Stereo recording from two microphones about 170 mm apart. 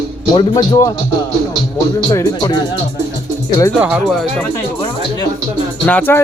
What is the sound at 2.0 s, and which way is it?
Speech, 20° left (ahead or behind).